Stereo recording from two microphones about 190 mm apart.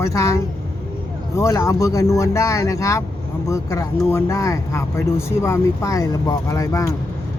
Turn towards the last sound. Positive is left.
turn(degrees=15)  # may be behind; listen again after turning